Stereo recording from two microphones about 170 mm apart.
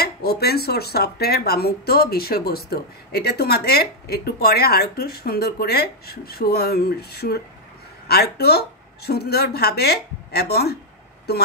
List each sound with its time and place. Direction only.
0.0 s speech: 70° left (ahead or behind)